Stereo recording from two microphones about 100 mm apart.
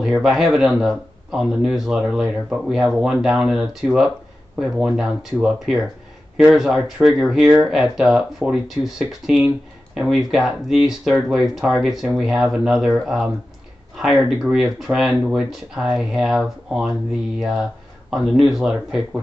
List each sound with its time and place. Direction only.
0.0 s speech: 5° right (ahead or behind)
14.4 s speech: 5° right (ahead or behind)